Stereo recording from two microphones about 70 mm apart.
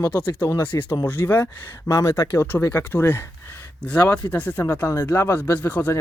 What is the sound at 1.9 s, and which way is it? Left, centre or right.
Speech, left.